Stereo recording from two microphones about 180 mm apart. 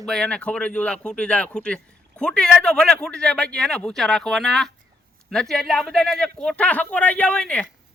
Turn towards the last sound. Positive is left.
turn(degrees=5)  # may be behind; listen again after turning